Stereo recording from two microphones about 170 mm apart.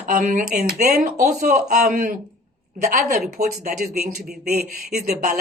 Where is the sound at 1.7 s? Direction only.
60° right (ahead or behind).